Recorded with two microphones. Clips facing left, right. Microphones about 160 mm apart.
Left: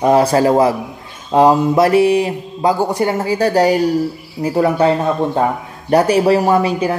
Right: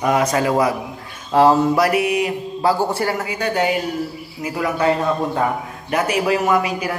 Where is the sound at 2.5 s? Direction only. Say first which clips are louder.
Left 4 dB; 15° left (ahead or behind).